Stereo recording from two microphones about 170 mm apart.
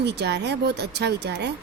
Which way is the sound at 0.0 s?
80° right.